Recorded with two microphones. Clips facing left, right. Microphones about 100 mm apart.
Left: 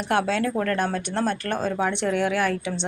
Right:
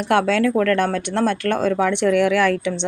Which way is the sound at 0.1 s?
60° right (ahead or behind).